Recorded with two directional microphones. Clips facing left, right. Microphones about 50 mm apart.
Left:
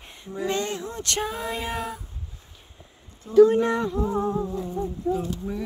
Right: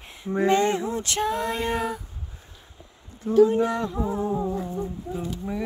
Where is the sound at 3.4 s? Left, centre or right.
Left.